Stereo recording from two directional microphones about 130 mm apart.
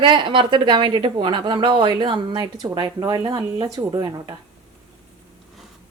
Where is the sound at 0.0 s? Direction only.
40° right (ahead or behind); by 4.4 s 25° right (ahead or behind).